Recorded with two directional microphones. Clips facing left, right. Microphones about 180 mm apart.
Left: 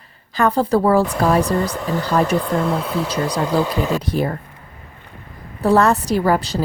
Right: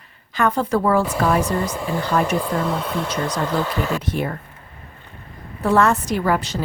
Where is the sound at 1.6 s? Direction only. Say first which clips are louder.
Left 2 dB; 5° right (ahead or behind); by 3.9 s 15° left (ahead or behind).